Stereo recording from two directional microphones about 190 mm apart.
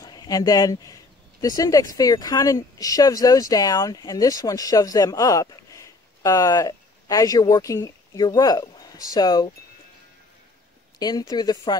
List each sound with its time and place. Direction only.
0.0 s speech: 20° left (ahead or behind)
11.0 s speech: 20° left (ahead or behind)